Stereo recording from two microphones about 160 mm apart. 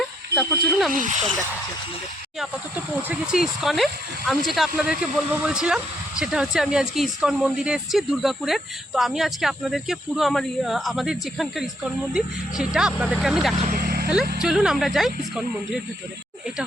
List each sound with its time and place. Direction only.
0.0 s a sound: centre (ahead or behind)
3.1 s speech: 5° right (ahead or behind)
13.6 s vehicle: 55° right (ahead or behind); by 14.1 s 70° right (ahead or behind)
14.4 s speech: 5° right (ahead or behind)